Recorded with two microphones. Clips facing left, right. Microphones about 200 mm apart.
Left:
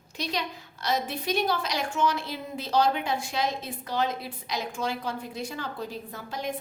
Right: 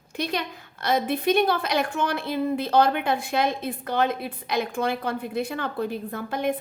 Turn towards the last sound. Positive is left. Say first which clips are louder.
# right 7 dB
turn(degrees=-60)  # may be behind; listen again after turning